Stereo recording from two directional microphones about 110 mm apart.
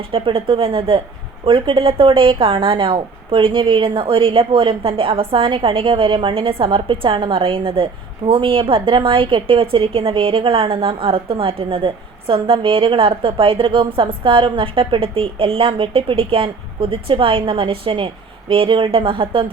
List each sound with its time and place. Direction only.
0.1 s a woman's voice: 55° right (ahead or behind)